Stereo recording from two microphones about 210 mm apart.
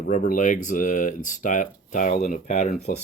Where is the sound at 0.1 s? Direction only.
35° left (ahead or behind).